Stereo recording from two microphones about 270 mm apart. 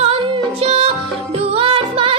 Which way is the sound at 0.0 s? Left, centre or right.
Right.